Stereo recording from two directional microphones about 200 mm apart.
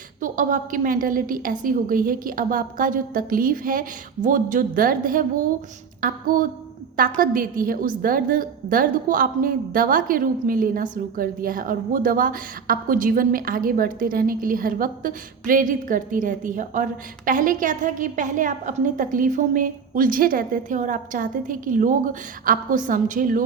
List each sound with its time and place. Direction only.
0.2 s a woman's voice: 40° right (ahead or behind)